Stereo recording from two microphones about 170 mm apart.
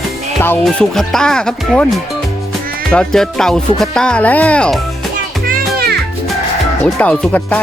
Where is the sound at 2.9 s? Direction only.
5° left (ahead or behind).